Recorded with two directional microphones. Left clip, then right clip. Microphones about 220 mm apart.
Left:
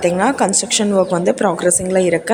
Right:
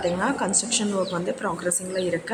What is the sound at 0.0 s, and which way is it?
A woman's voice, 35° left (ahead or behind).